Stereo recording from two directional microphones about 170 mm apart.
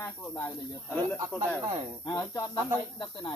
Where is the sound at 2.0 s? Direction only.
20° left (ahead or behind).